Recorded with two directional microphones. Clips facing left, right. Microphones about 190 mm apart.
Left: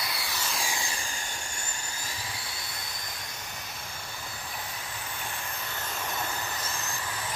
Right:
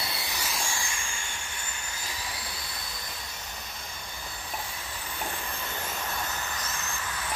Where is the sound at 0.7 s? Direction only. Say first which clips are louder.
Left 1 dB; 20° left (ahead or behind).